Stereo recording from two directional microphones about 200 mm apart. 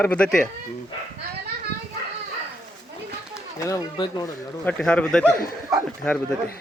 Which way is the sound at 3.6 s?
15° left (ahead or behind).